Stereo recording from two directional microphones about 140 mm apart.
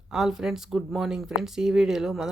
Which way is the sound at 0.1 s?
5° right (ahead or behind).